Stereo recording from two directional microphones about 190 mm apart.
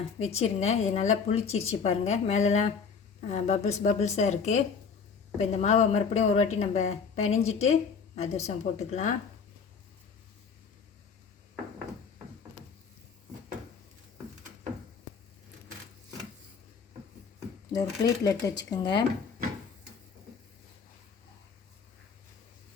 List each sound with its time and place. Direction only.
0.2 s speech: 35° left (ahead or behind)
17.7 s speech: 20° left (ahead or behind)